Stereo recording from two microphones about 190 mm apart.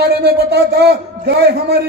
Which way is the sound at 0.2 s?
55° right (ahead or behind).